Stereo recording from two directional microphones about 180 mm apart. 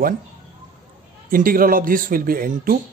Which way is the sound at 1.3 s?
50° right (ahead or behind).